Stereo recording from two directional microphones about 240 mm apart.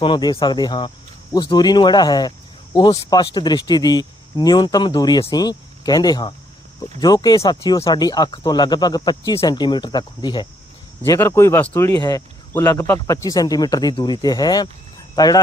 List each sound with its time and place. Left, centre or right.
0.0 s speech: centre